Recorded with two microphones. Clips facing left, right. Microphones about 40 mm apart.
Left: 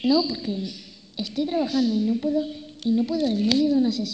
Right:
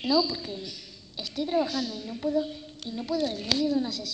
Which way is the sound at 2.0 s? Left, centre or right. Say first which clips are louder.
Left 5 dB; centre.